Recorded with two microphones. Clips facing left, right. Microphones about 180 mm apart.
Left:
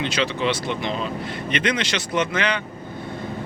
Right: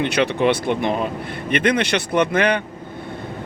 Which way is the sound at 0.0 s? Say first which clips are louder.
Right 5 dB; 55° right (ahead or behind).